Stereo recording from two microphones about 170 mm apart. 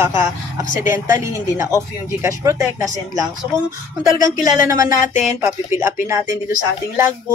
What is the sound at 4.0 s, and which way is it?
Speech, 20° right (ahead or behind).